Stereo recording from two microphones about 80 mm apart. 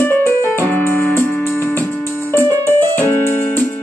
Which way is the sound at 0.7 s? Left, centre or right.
Left.